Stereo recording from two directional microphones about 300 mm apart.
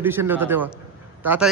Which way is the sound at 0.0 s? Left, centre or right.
Centre.